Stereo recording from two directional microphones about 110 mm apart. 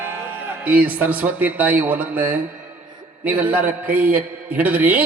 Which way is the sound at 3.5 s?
15° right (ahead or behind).